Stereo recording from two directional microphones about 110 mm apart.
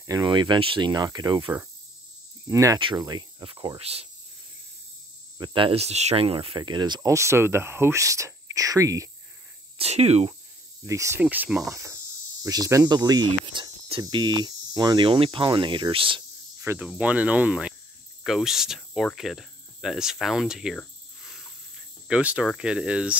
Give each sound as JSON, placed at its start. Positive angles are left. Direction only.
{"t": 0.2, "sound": "speech", "side_deg": -45}
{"t": 3.8, "sound": "speech", "side_deg": -65}
{"t": 5.4, "sound": "speech", "side_deg": -50}
{"t": 6.6, "sound": "speech", "side_deg": -40}
{"t": 9.8, "sound": "speech", "side_deg": -75}
{"t": 10.9, "sound": "speech", "side_deg": -30}
{"t": 11.1, "sound": "speech", "side_deg": -15}
{"t": 11.6, "sound": "speech", "side_deg": -25}
{"t": 16.6, "sound": "cricket", "side_deg": -15}
{"t": 17.0, "sound": "speech", "side_deg": -15}
{"t": 22.0, "sound": "speech", "side_deg": -10}